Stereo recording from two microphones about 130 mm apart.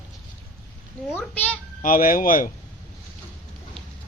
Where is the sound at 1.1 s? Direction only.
15° left (ahead or behind).